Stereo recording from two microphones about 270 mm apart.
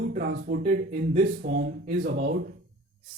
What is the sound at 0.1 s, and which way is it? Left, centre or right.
Speech, right.